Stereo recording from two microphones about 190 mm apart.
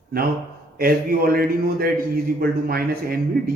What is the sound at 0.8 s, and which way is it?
A man's voice, 50° right (ahead or behind).